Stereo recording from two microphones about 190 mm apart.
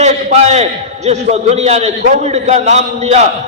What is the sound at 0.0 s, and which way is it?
A man's voice, 35° right (ahead or behind).